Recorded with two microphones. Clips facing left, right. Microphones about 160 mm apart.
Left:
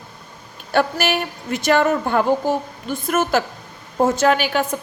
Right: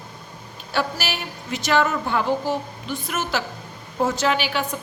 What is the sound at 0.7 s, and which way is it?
A woman's voice, 55° left (ahead or behind).